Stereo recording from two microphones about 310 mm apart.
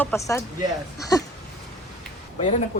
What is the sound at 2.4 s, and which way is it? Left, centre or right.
Speech, left.